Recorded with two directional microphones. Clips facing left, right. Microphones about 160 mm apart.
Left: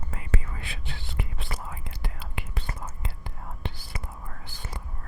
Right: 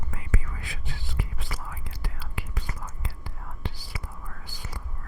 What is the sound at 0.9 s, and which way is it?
Whispering, 65° left (ahead or behind).